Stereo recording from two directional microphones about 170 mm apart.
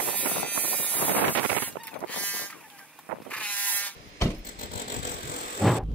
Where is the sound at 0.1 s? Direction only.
10° left (ahead or behind).